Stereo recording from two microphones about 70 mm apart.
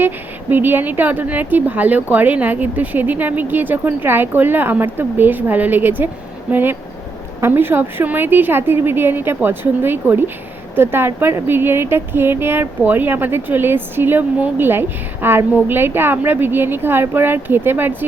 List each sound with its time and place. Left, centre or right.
0.5 s speech: right